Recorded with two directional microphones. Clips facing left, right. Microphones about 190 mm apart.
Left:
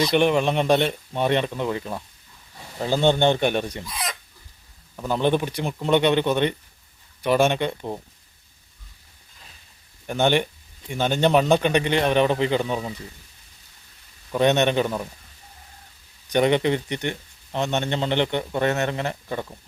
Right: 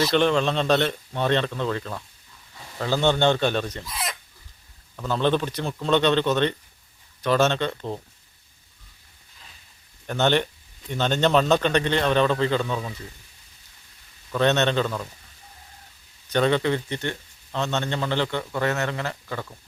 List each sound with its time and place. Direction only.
0.1 s speech: 15° left (ahead or behind)
3.8 s chicken: centre (ahead or behind)
4.9 s speech: 15° left (ahead or behind)
10.1 s speech: 10° left (ahead or behind)
14.3 s speech: 15° left (ahead or behind)
16.3 s speech: 15° left (ahead or behind)